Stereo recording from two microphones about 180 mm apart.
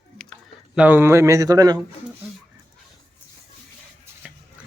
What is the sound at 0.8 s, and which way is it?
Speech, 10° right (ahead or behind).